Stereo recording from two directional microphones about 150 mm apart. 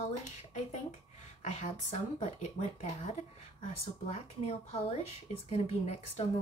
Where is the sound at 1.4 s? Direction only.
50° left (ahead or behind).